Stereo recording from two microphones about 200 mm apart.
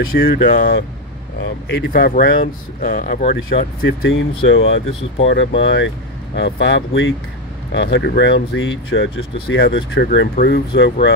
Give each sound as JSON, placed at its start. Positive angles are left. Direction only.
{"t": 0.1, "sound": "speech", "side_deg": 45}
{"t": 4.0, "sound": "speech", "side_deg": 75}
{"t": 4.6, "sound": "speech", "side_deg": 65}